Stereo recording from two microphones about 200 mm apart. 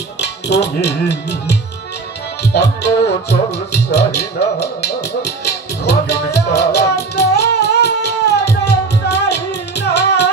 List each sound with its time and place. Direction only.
0.2 s speech: 55° left (ahead or behind)
2.5 s music: 55° left (ahead or behind)